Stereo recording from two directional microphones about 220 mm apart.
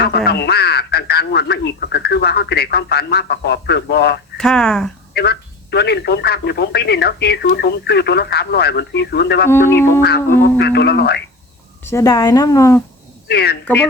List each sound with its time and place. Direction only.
0.0 s speech: 45° left (ahead or behind)
4.4 s speech: 5° left (ahead or behind)
5.1 s speech: 45° left (ahead or behind)
9.5 s speech: 10° left (ahead or behind)
10.6 s speech: 50° left (ahead or behind)
11.9 s speech: 15° left (ahead or behind)
13.2 s speech: 45° left (ahead or behind)